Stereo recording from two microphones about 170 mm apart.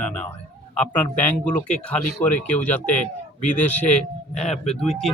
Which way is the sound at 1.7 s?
5° left (ahead or behind).